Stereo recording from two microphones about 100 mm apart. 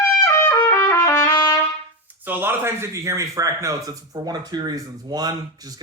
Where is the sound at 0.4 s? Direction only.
25° left (ahead or behind).